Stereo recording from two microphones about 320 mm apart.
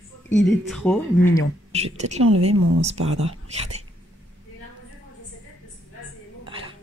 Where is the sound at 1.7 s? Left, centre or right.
Centre.